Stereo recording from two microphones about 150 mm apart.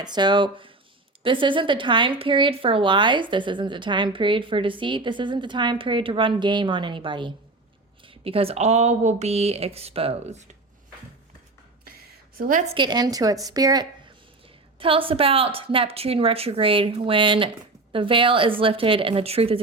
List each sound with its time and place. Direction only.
0.0 s speech: 30° right (ahead or behind)
12.4 s a woman's voice: 65° right (ahead or behind)
12.7 s a woman's voice: 30° right (ahead or behind)
14.8 s speech: 35° right (ahead or behind)